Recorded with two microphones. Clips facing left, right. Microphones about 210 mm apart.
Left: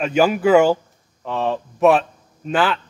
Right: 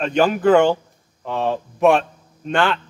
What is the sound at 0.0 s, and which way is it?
A man's voice, 5° left (ahead or behind).